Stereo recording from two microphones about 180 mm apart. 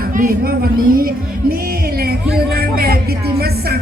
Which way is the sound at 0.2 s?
50° right (ahead or behind).